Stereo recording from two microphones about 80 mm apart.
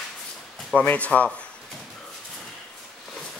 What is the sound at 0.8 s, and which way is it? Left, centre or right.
Speech, centre.